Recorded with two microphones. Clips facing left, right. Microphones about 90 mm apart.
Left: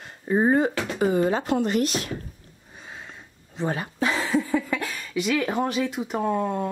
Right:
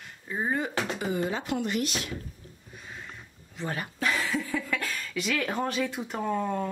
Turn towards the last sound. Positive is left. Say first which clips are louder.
# left 4 dB
turn(degrees=15)  # may be behind; listen again after turning